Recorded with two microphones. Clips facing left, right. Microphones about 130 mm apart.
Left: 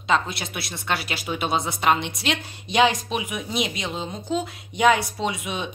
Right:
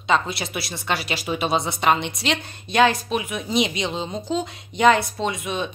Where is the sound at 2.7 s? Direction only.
15° left (ahead or behind).